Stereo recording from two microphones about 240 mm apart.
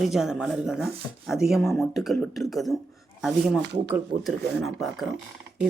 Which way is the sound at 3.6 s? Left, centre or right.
Right.